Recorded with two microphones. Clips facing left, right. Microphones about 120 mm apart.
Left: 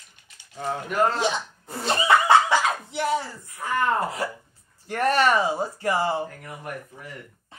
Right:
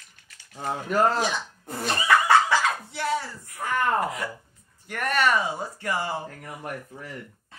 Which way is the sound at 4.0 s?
30° left (ahead or behind).